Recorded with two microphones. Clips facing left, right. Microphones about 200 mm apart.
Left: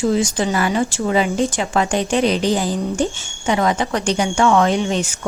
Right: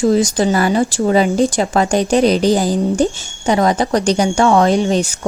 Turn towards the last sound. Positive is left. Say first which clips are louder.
# right 5 dB
turn(degrees=-35)  # may be behind; listen again after turning